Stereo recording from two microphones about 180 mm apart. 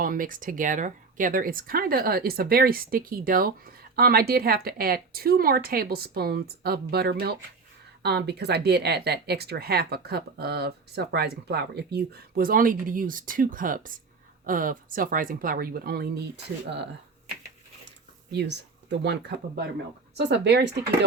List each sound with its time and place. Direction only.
0.0 s speech: 50° right (ahead or behind)
18.3 s speech: 70° right (ahead or behind)